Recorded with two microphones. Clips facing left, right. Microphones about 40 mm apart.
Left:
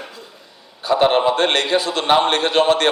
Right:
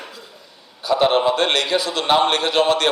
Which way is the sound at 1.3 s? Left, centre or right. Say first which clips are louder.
Left 2 dB; left.